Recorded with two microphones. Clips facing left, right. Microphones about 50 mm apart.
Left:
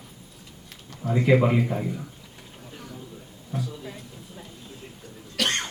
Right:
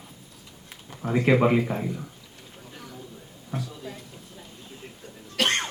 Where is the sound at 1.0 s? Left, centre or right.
Right.